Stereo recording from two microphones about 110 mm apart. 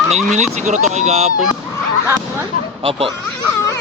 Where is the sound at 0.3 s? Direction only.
85° right.